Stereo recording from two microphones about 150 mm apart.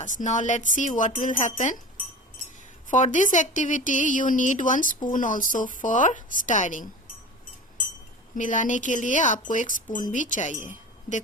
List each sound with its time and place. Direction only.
0.0 s a woman's voice: 55° left (ahead or behind)
2.9 s a woman's voice: 55° left (ahead or behind)
8.4 s a woman's voice: 60° left (ahead or behind)